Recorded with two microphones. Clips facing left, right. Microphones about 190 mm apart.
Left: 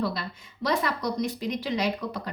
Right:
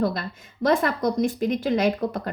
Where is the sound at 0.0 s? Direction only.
50° right (ahead or behind).